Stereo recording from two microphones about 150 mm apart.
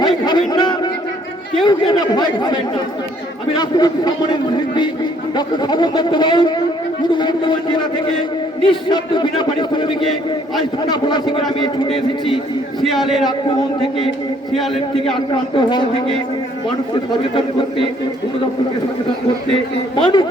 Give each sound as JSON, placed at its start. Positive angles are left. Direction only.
{"t": 0.0, "sound": "a man's voice", "side_deg": 30}
{"t": 3.6, "sound": "a man's voice", "side_deg": 25}
{"t": 8.6, "sound": "a man's voice", "side_deg": 30}
{"t": 12.8, "sound": "a man's voice", "side_deg": 0}
{"t": 16.9, "sound": "a man's voice", "side_deg": 35}
{"t": 20.0, "sound": "a man's voice", "side_deg": 35}